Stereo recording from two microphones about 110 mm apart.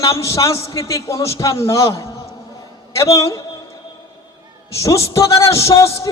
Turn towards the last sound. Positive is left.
turn(degrees=25)  # may be behind; listen again after turning